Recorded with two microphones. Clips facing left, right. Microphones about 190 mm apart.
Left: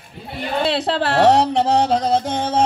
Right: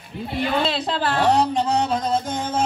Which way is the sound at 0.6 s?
70° left (ahead or behind).